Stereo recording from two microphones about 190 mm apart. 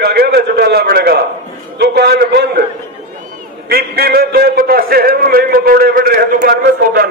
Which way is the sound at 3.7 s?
55° right (ahead or behind).